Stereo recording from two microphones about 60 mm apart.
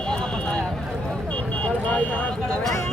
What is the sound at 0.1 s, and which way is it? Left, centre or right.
Clip-clop, centre.